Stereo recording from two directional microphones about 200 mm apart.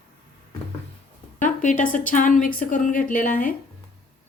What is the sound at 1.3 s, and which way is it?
A woman's voice, 40° left (ahead or behind).